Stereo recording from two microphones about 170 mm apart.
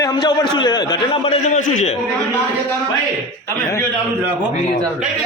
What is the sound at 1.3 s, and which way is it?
Speech, 45° left (ahead or behind).